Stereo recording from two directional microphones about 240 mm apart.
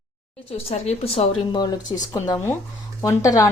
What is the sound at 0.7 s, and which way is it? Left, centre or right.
A woman's voice, left.